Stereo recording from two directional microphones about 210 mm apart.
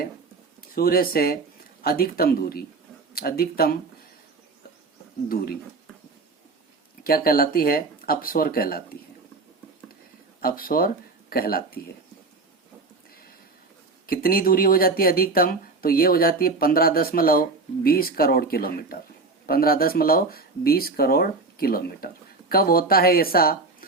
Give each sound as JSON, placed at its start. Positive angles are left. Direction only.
{"t": 0.8, "sound": "speech", "side_deg": 45}
{"t": 5.3, "sound": "speech", "side_deg": 45}
{"t": 7.0, "sound": "speech", "side_deg": 45}
{"t": 10.4, "sound": "speech", "side_deg": 45}
{"t": 14.1, "sound": "speech", "side_deg": 45}